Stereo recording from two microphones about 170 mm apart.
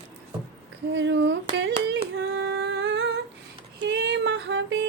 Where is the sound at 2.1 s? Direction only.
90° right.